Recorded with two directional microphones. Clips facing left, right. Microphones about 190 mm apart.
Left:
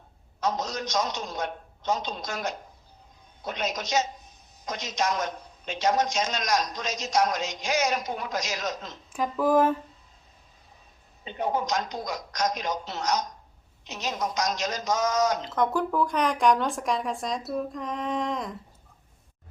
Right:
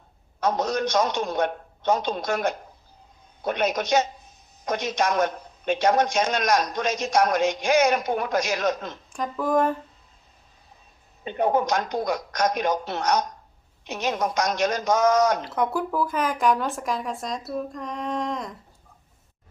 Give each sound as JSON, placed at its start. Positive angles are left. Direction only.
{"t": 0.3, "sound": "a man's voice", "side_deg": -60}
{"t": 9.1, "sound": "speech", "side_deg": 5}
{"t": 11.2, "sound": "a man's voice", "side_deg": -55}
{"t": 15.4, "sound": "speech", "side_deg": -10}